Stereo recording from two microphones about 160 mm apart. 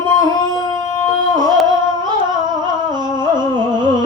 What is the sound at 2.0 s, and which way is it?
Humming, 25° right (ahead or behind).